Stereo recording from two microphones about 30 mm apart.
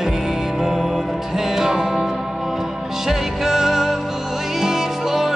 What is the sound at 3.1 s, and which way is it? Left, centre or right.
Music, centre.